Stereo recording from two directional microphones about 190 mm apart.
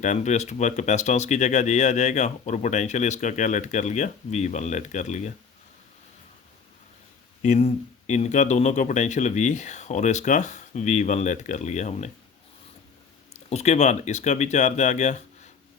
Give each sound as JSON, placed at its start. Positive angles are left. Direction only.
{"t": 0.0, "sound": "speech", "side_deg": 40}
{"t": 7.4, "sound": "speech", "side_deg": 35}
{"t": 13.3, "sound": "speech", "side_deg": 35}